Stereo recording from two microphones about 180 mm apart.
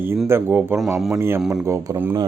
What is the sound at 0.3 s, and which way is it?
A man's voice, 10° right (ahead or behind).